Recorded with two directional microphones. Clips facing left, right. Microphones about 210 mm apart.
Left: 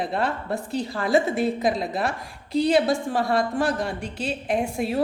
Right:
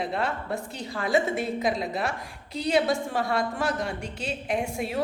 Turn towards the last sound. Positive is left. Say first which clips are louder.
# left 4 dB
turn(degrees=35)  # may be behind; listen again after turning